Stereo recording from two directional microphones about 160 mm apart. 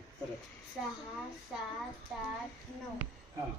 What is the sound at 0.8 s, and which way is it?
Speech, centre (ahead or behind).